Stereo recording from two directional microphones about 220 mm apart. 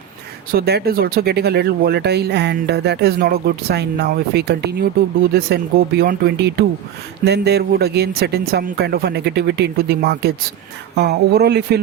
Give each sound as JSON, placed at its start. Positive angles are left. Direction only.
{"t": 0.5, "sound": "speech", "side_deg": -45}